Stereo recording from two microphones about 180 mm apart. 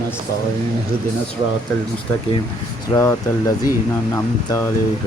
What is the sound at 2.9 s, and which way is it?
Speech, 15° left (ahead or behind).